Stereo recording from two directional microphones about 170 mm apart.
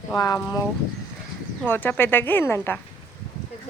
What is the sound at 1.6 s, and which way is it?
Speech, 10° left (ahead or behind).